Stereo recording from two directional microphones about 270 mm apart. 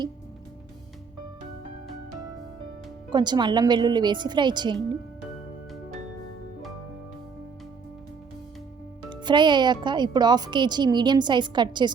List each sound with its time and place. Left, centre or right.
3.1 s speech: centre
9.0 s speech: centre